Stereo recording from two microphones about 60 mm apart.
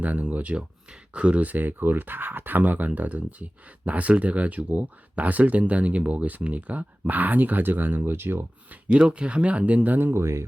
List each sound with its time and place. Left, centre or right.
0.0 s speech: right
8.7 s speech: centre
10.2 s speech: right